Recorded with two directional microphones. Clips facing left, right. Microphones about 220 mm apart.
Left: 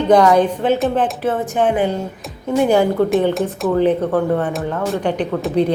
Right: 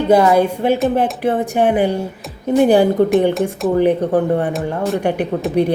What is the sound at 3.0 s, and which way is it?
Speech, 15° right (ahead or behind).